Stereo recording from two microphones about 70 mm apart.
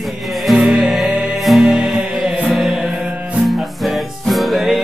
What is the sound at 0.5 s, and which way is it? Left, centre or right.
Music, centre.